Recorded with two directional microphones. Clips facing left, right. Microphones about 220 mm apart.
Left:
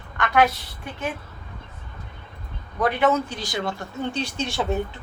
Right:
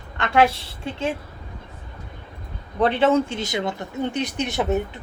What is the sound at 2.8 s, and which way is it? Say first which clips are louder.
Speech: right 3 dB; 30° right (ahead or behind).